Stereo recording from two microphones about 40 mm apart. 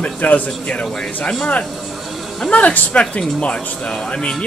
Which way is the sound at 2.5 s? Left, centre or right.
Left.